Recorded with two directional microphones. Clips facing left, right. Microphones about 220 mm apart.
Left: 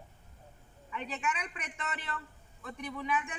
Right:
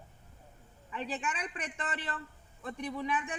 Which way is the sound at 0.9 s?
35° right (ahead or behind).